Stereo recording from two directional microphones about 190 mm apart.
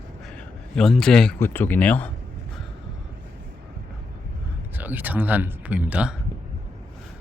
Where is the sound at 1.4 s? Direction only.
10° left (ahead or behind).